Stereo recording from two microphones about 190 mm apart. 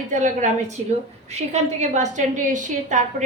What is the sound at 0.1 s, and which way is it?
A woman's voice, 40° right (ahead or behind).